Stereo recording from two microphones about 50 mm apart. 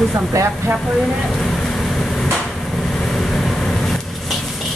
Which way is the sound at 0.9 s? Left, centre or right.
Centre.